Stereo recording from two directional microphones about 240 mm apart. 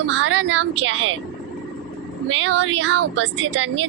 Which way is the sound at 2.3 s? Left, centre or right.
Right.